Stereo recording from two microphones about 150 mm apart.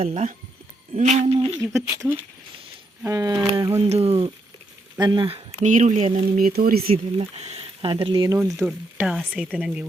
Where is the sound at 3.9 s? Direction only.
40° right (ahead or behind).